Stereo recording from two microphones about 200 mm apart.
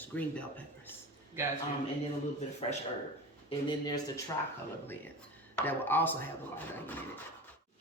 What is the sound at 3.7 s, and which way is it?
Speech, 20° left (ahead or behind).